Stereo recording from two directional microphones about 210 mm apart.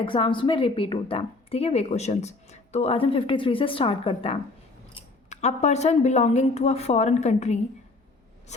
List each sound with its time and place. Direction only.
0.0 s a woman's voice: 25° left (ahead or behind)